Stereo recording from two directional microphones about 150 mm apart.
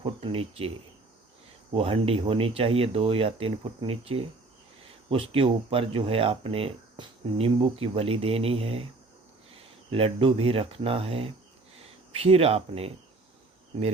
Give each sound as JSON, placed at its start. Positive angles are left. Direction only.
{"t": 0.0, "sound": "speech", "side_deg": -40}
{"t": 1.7, "sound": "speech", "side_deg": -40}